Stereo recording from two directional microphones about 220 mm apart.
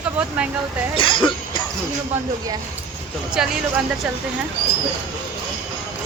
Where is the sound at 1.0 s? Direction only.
25° left (ahead or behind).